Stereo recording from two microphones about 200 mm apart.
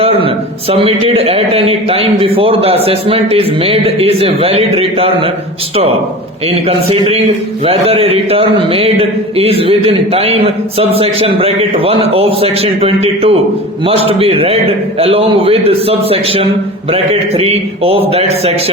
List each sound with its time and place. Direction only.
0.0 s a man's voice: 30° right (ahead or behind)
6.5 s a man's voice: 30° right (ahead or behind)